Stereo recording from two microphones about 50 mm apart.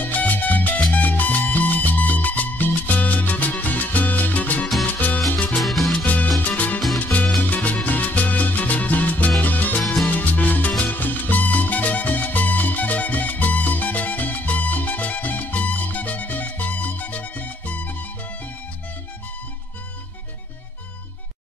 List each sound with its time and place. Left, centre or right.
0.0 s salsa music: left
0.9 s music: left
4.8 s salsa music: left
5.6 s music: centre
6.4 s music: left
7.5 s salsa music: left
9.4 s music: left